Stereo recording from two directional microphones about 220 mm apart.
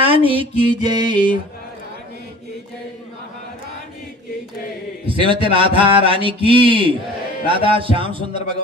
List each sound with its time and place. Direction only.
0.0 s speech: 25° right (ahead or behind)
5.0 s speech: 25° right (ahead or behind)